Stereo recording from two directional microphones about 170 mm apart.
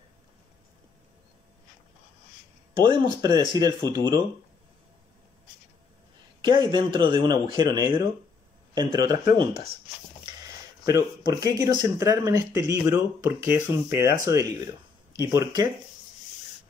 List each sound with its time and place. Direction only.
2.8 s speech: 25° right (ahead or behind)
6.4 s speech: 25° right (ahead or behind)
10.9 s speech: 20° right (ahead or behind)